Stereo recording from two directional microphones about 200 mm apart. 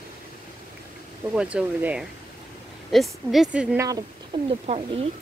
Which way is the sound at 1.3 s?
5° right (ahead or behind).